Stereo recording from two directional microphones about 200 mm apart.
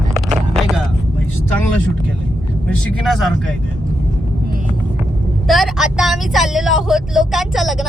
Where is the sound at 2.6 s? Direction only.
Centre (ahead or behind).